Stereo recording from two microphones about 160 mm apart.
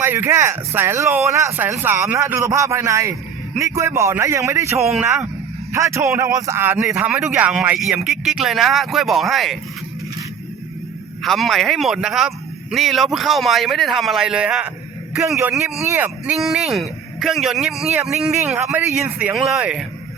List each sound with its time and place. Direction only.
0.0 s speech: 15° right (ahead or behind)
4.8 s speech: centre (ahead or behind)
5.7 s speech: 20° right (ahead or behind)
7.1 s speech: 5° right (ahead or behind)
11.2 s speech: centre (ahead or behind)
18.6 s speech: 15° right (ahead or behind)
19.3 s speech: 5° right (ahead or behind)